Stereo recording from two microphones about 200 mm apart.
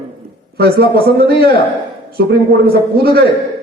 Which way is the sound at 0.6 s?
50° right (ahead or behind).